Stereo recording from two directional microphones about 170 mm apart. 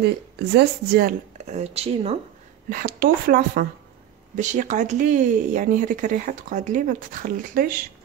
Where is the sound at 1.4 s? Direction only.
40° right (ahead or behind).